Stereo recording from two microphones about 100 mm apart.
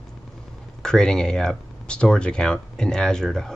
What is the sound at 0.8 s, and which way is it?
Speech, 5° left (ahead or behind).